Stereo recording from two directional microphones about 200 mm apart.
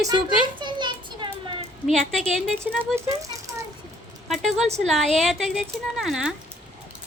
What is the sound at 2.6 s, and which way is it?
Speech, 15° right (ahead or behind).